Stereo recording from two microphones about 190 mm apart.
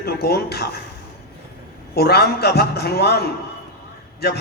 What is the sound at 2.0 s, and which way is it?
A man's voice, 55° left (ahead or behind).